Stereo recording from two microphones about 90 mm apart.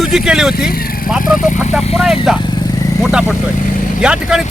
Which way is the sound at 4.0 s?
10° right (ahead or behind).